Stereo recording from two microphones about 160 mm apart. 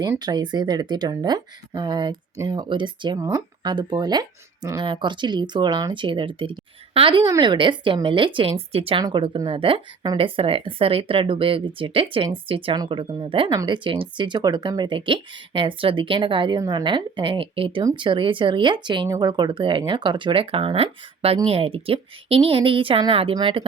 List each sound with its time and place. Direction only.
0.2 s speech: 25° right (ahead or behind)